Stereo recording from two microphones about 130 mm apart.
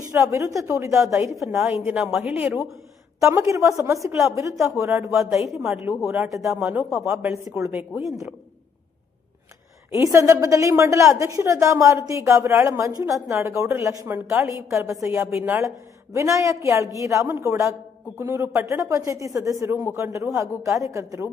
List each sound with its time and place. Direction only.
0.1 s a woman's voice: 25° right (ahead or behind)
6.4 s speech: centre (ahead or behind)
6.7 s a woman's voice: 15° right (ahead or behind)
7.9 s speech: centre (ahead or behind)
9.9 s a woman's voice: 25° right (ahead or behind)